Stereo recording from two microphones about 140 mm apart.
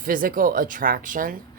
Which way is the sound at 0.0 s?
85° right.